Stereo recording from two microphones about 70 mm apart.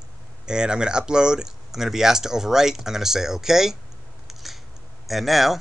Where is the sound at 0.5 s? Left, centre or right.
Centre.